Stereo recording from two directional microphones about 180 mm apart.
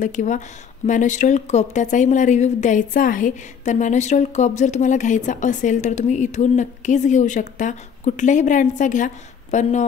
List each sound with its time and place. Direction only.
0.0 s speech: 45° left (ahead or behind)